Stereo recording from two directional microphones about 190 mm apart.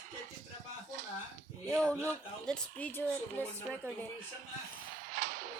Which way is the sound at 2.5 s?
5° left (ahead or behind).